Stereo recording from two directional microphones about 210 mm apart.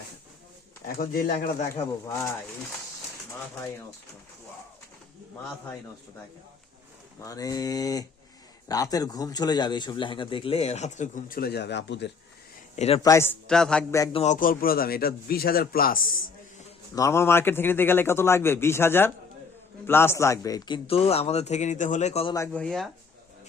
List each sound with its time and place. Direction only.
0.9 s speech: 45° left (ahead or behind)
1.7 s a man's voice: 15° left (ahead or behind)
7.2 s a man's voice: 15° left (ahead or behind); by 12.1 s 55° left (ahead or behind)
12.7 s speech: 30° left (ahead or behind)
13.0 s a man's voice: 15° left (ahead or behind)
13.5 s speech: 5° left (ahead or behind)
14.1 s a man's voice: 30° left (ahead or behind)
16.9 s a man's voice: 15° left (ahead or behind)
22.4 s speech: 5° left (ahead or behind)